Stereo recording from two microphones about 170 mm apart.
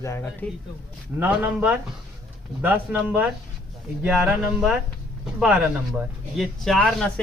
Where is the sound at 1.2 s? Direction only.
5° right (ahead or behind).